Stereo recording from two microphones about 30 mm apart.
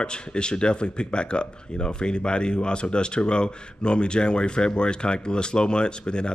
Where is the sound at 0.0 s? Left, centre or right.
Left.